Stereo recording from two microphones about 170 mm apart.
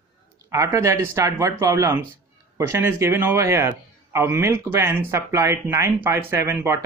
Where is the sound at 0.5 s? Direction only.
15° right (ahead or behind).